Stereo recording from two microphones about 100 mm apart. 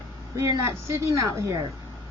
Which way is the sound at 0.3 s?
30° right (ahead or behind).